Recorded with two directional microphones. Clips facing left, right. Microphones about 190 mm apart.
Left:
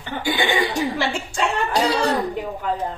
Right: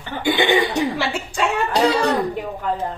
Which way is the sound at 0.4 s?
20° right (ahead or behind).